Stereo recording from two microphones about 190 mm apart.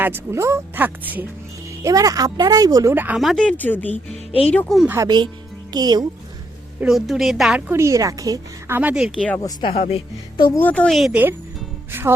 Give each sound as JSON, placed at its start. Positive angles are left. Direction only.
{"t": 0.0, "sound": "speech", "side_deg": -10}
{"t": 4.3, "sound": "speech", "side_deg": 30}
{"t": 4.5, "sound": "a woman's voice", "side_deg": 0}
{"t": 4.9, "sound": "speech", "side_deg": -20}
{"t": 6.7, "sound": "a woman's voice", "side_deg": -5}
{"t": 7.7, "sound": "speech", "side_deg": -15}
{"t": 9.4, "sound": "speech", "side_deg": 25}
{"t": 10.5, "sound": "a woman's voice", "side_deg": 10}